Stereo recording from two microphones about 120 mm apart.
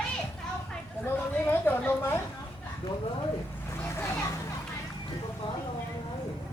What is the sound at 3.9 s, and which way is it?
Vehicle, 25° left (ahead or behind).